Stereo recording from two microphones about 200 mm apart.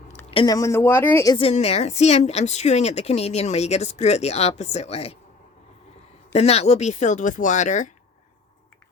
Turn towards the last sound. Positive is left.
turn(degrees=40)  # may be behind; listen again after turning